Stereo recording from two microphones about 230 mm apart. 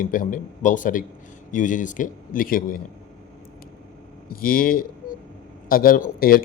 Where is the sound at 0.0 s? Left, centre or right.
Left.